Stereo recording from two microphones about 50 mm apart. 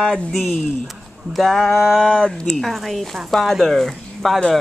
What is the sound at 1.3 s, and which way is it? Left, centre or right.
Speech, centre.